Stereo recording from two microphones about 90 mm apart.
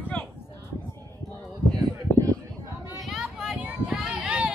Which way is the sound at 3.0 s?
5° right (ahead or behind).